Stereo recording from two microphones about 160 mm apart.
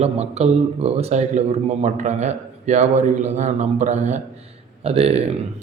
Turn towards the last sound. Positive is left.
turn(degrees=-40)  # may be behind; listen again after turning